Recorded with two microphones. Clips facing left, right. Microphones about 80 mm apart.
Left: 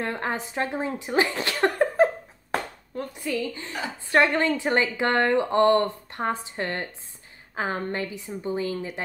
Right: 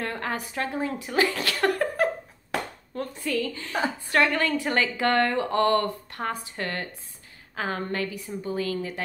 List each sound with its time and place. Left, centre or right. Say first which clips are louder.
0.0 s a woman's voice: left 2 dB; left